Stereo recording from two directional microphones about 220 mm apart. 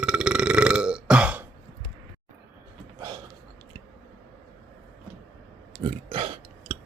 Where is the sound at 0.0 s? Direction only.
5° right (ahead or behind).